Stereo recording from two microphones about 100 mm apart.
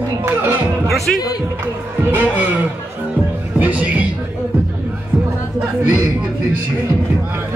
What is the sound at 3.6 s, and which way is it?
Music, 15° right (ahead or behind).